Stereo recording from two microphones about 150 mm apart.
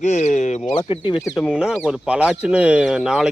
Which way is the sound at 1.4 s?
5° right (ahead or behind).